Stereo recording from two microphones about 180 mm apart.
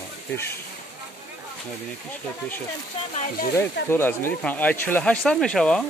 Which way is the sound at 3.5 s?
10° left (ahead or behind).